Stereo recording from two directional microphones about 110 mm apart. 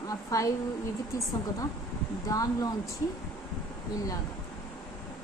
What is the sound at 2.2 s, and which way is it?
Speech, 30° left (ahead or behind).